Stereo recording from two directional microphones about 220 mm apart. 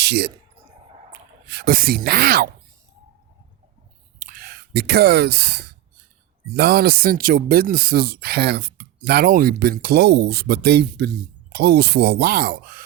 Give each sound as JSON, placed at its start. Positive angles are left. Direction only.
{"t": 0.0, "sound": "speech", "side_deg": -50}
{"t": 1.5, "sound": "speech", "side_deg": -45}
{"t": 4.2, "sound": "speech", "side_deg": -40}